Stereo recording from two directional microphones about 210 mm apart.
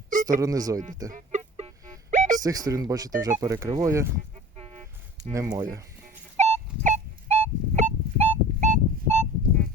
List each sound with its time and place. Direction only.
0.3 s speech: 15° right (ahead or behind)
1.1 s music: 30° right (ahead or behind)
2.4 s speech: 15° right (ahead or behind)
5.3 s speech: 15° right (ahead or behind)
6.3 s a sound: 30° right (ahead or behind)